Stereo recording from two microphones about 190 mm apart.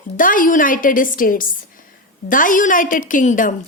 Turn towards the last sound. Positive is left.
turn(degrees=45)  # may be behind; listen again after turning